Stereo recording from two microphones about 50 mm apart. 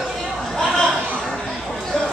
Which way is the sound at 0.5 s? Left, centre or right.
Centre.